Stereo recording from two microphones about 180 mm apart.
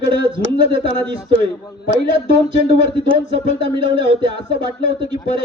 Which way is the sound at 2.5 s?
30° right (ahead or behind).